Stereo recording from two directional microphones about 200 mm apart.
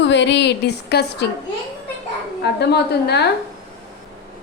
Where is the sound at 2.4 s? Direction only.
55° left (ahead or behind).